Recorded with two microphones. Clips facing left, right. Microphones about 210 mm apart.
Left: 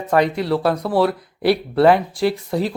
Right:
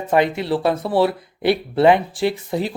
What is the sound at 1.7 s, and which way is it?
Speech, 20° right (ahead or behind).